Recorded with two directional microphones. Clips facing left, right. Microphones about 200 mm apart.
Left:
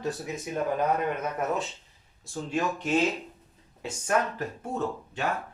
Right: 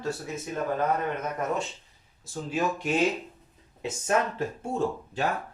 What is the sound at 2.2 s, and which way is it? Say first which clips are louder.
Speech: left 1 dB; centre (ahead or behind).